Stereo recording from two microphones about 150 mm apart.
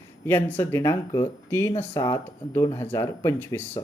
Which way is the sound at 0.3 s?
15° left (ahead or behind).